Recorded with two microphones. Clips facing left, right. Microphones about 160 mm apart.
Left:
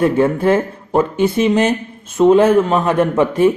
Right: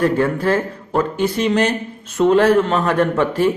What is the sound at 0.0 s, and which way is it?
A man's voice, 20° left (ahead or behind).